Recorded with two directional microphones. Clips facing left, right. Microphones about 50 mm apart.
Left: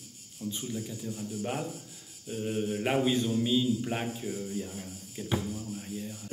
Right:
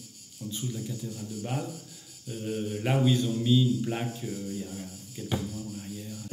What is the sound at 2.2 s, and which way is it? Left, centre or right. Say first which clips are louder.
Mantra: left 1 dB; centre.